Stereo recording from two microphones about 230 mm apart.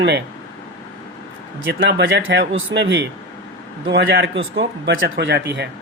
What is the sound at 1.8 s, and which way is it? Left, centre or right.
Speech, right.